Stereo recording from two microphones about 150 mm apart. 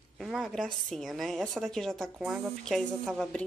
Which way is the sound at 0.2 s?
Centre (ahead or behind).